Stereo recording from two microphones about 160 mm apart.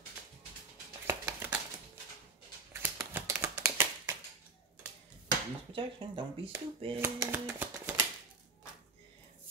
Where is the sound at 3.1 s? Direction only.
15° right (ahead or behind).